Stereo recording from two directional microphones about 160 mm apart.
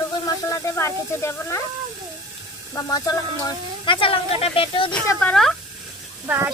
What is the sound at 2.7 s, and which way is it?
Speech, 20° left (ahead or behind).